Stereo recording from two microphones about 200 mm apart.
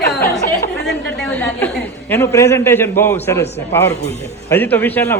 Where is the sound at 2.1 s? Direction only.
15° left (ahead or behind).